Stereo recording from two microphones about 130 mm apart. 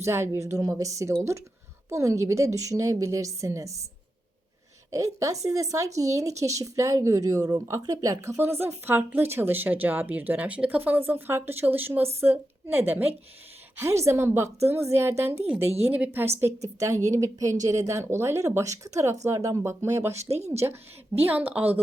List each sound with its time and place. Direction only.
0.0 s speech: 20° right (ahead or behind)
4.9 s speech: 25° right (ahead or behind)
16.6 s speech: 25° right (ahead or behind)
20.3 s speech: 55° right (ahead or behind)
20.6 s speech: 15° right (ahead or behind)